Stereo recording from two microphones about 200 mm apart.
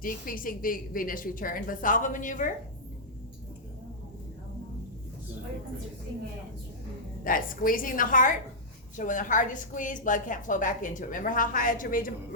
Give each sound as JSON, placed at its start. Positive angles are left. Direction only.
{"t": 0.0, "sound": "a woman's voice", "side_deg": 45}
{"t": 7.3, "sound": "a woman's voice", "side_deg": 45}